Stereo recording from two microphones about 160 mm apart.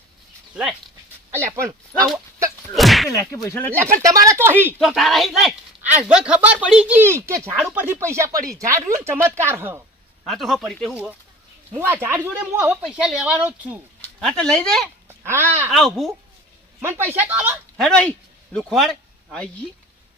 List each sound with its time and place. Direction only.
0.5 s speech: 5° right (ahead or behind)
1.3 s speech: 15° right (ahead or behind)
2.6 s a sound: centre (ahead or behind)
3.3 s speech: 20° left (ahead or behind)
4.0 s speech: 20° right (ahead or behind)
4.8 s speech: centre (ahead or behind); by 9.8 s 15° right (ahead or behind)
10.2 s speech: centre (ahead or behind); by 12.8 s 15° right (ahead or behind)
12.8 s speech: 5° right (ahead or behind)
14.0 s speech: 5° left (ahead or behind)
15.0 s babbling: 15° right (ahead or behind)
15.7 s speech: centre (ahead or behind)
17.1 s speech: 10° right (ahead or behind)
17.7 s a man's voice: 5° left (ahead or behind)